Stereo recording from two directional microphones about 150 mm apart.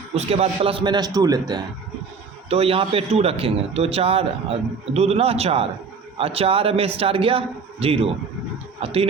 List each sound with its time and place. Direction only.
0.1 s a man's voice: 45° right (ahead or behind); by 1.6 s 25° right (ahead or behind)
2.5 s a man's voice: 40° right (ahead or behind)